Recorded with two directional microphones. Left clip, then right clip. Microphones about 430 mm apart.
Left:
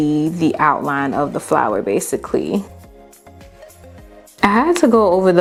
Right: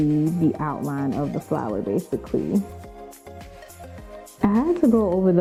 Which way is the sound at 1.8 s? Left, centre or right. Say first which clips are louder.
Left 7 dB; left.